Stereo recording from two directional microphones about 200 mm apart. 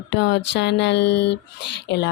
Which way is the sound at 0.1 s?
60° left (ahead or behind).